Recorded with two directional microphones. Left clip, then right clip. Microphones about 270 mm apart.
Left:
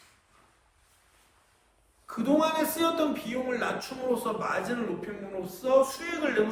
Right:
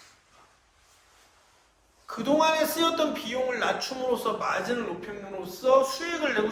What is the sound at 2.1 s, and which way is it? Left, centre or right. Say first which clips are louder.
A man's voice: right 3 dB; right.